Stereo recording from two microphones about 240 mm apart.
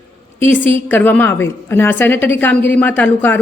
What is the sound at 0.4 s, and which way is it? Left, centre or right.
A woman's voice, centre.